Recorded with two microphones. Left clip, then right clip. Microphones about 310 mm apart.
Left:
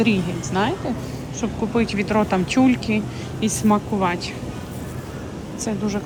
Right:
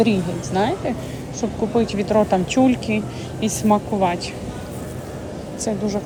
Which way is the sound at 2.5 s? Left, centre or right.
Centre.